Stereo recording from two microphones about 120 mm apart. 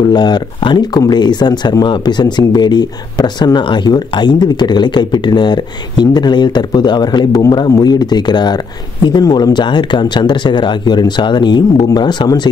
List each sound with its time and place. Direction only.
0.0 s speech: 35° left (ahead or behind)